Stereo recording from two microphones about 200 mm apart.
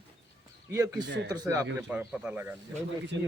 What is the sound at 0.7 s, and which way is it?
A man's voice, 15° right (ahead or behind).